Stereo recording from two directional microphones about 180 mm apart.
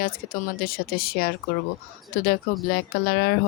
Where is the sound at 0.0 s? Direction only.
50° left (ahead or behind).